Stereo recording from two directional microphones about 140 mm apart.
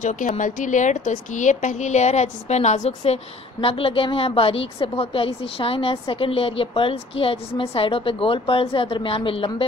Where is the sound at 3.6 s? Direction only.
40° left (ahead or behind).